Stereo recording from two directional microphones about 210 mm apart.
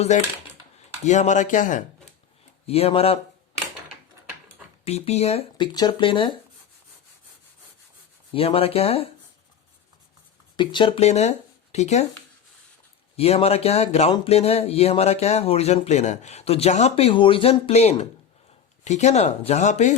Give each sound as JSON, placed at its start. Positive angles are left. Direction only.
{"t": 1.0, "sound": "speech", "side_deg": 35}
{"t": 4.9, "sound": "speech", "side_deg": 30}
{"t": 8.3, "sound": "speech", "side_deg": 25}
{"t": 10.6, "sound": "speech", "side_deg": 20}
{"t": 13.1, "sound": "speech", "side_deg": 30}